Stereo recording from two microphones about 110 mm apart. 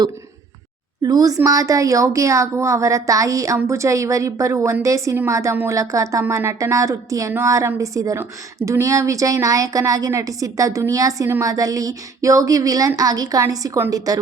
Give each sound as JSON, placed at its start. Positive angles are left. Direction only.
{"t": 1.0, "sound": "a woman's voice", "side_deg": -35}